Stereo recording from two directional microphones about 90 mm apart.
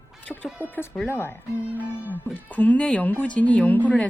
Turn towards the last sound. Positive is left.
turn(degrees=15)  # may be behind; listen again after turning